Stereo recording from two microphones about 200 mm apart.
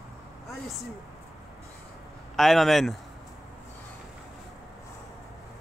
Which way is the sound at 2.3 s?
Centre (ahead or behind).